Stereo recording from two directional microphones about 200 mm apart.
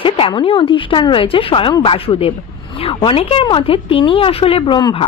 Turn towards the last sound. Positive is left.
turn(degrees=20)  # may be behind; listen again after turning